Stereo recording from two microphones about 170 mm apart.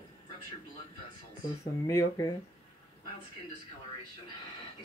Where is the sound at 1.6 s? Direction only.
15° left (ahead or behind).